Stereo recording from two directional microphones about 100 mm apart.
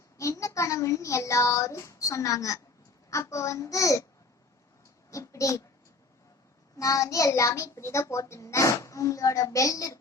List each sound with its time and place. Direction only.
0.2 s a child's voice: 30° left (ahead or behind)
5.1 s a child's voice: 30° left (ahead or behind)
6.7 s a child's voice: 35° left (ahead or behind)